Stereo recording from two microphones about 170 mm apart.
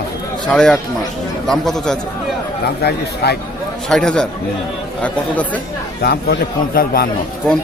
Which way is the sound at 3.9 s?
5° left (ahead or behind).